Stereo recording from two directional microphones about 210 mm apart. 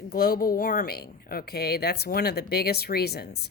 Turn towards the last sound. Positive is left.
turn(degrees=50)  # may be behind; listen again after turning